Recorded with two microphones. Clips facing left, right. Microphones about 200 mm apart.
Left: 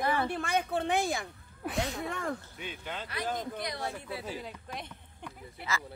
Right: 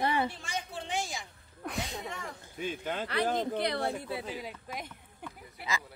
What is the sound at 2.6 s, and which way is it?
Speech, 45° right (ahead or behind).